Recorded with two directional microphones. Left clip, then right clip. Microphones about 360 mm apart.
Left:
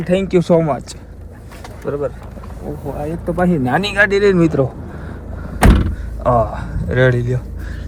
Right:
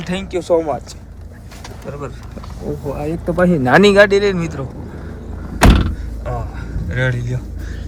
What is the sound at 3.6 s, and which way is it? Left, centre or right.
Speech, right.